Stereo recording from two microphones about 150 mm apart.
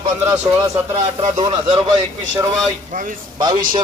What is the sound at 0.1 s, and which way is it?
Speech, 20° right (ahead or behind).